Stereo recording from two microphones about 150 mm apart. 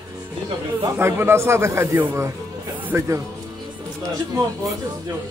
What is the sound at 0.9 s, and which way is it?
Speech, 15° right (ahead or behind).